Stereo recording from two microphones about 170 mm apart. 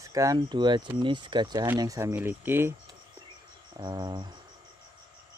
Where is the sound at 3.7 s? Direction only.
25° right (ahead or behind).